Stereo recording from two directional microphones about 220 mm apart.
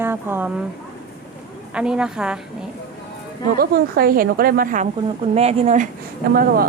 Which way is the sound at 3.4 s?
40° right (ahead or behind).